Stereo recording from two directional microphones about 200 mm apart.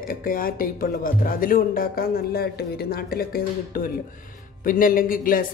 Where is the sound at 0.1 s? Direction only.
45° left (ahead or behind).